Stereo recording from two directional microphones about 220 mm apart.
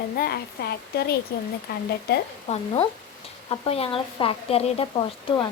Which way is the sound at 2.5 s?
30° left (ahead or behind).